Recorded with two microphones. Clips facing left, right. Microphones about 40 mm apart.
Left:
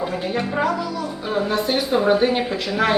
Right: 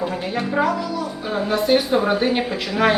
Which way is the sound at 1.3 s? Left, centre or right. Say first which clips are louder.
Right 3 dB; centre.